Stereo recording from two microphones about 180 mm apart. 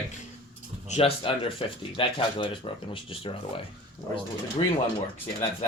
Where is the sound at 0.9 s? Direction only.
35° left (ahead or behind).